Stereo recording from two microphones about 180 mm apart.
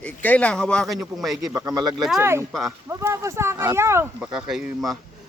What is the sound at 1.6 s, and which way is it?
Speech, 20° right (ahead or behind).